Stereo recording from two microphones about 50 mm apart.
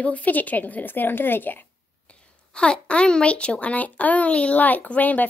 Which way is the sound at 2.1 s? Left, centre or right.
Left.